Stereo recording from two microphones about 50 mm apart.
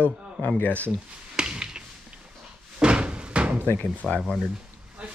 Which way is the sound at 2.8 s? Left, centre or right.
Right.